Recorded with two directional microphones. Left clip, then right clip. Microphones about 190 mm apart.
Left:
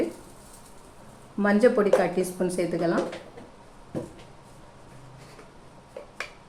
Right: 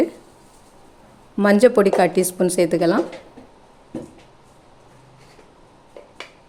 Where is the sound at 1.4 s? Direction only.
55° right (ahead or behind).